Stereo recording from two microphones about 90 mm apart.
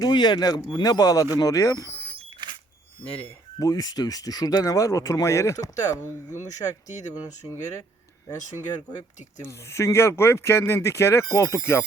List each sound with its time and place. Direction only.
0.0 s speech: 55° left (ahead or behind); by 1.9 s 40° left (ahead or behind)
3.6 s speech: 45° left (ahead or behind)
9.4 s speech: 30° left (ahead or behind)